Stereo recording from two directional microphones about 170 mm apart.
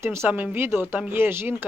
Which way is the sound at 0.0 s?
15° right (ahead or behind).